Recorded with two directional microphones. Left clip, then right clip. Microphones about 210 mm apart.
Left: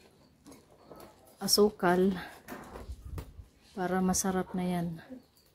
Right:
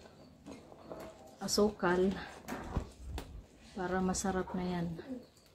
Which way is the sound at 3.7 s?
30° left (ahead or behind).